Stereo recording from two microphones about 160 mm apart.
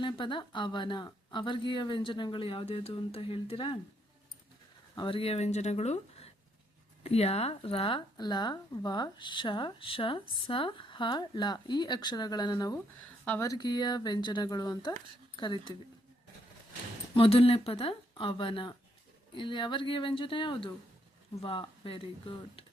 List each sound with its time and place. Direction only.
0.0 s a woman's voice: 30° left (ahead or behind)
4.9 s a woman's voice: 30° left (ahead or behind)
17.2 s a woman's voice: 35° left (ahead or behind)